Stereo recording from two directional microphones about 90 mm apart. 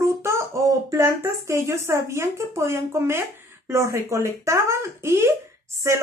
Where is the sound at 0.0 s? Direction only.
30° right (ahead or behind).